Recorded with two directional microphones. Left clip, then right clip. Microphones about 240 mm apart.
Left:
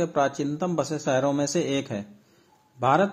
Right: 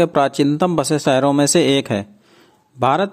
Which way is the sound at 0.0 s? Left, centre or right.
Right.